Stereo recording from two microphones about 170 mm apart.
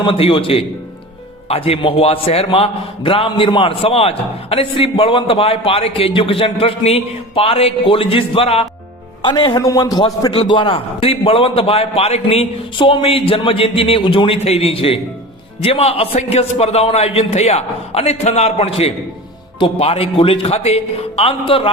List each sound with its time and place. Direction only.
0.0 s a man's voice: 30° left (ahead or behind)